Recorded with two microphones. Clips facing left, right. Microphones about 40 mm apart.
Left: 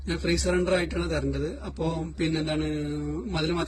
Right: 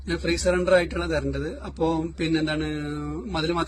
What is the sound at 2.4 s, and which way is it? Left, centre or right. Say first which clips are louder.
Mantra: right 2 dB; right.